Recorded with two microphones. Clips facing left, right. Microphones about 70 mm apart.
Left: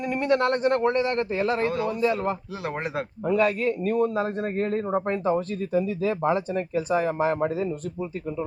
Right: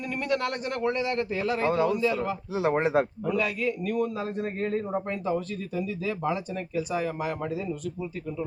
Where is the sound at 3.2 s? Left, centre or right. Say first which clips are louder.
Left 5 dB; left.